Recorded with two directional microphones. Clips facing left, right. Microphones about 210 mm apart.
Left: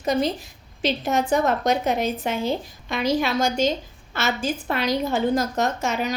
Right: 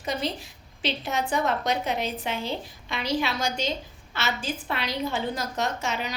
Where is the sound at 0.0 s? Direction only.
45° left (ahead or behind).